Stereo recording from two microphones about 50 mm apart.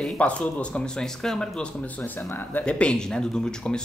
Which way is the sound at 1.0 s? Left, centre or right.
Centre.